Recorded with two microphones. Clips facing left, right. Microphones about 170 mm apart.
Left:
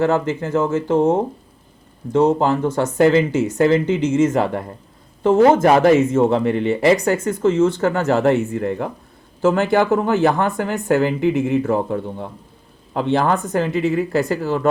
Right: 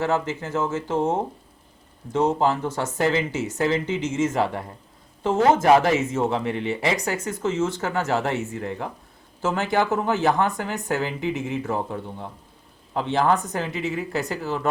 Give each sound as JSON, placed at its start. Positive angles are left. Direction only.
{"t": 0.0, "sound": "speech", "side_deg": 55}